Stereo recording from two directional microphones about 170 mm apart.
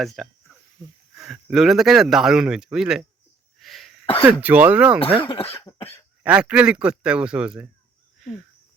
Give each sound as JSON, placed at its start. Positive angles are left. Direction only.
{"t": 0.0, "sound": "a man's voice", "side_deg": 0}
{"t": 3.6, "sound": "cough", "side_deg": 0}
{"t": 4.0, "sound": "speech", "side_deg": 30}
{"t": 4.3, "sound": "speech", "side_deg": -10}
{"t": 5.3, "sound": "speech", "side_deg": 35}
{"t": 5.8, "sound": "speech", "side_deg": 15}
{"t": 6.2, "sound": "speech", "side_deg": -5}
{"t": 8.2, "sound": "a sound", "side_deg": 0}